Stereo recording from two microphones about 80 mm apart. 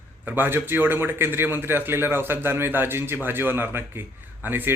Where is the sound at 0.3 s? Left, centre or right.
Right.